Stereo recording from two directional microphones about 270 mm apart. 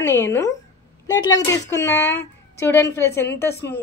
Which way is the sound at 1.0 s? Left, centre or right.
Centre.